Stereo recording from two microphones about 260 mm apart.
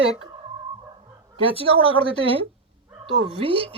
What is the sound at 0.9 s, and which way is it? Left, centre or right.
Bow-wow, right.